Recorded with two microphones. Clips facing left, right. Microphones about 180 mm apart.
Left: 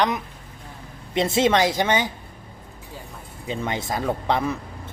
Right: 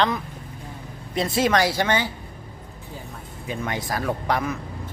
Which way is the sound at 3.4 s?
25° left (ahead or behind).